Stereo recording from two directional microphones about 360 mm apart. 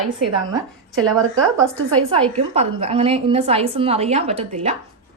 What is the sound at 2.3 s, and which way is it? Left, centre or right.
A woman's voice, centre.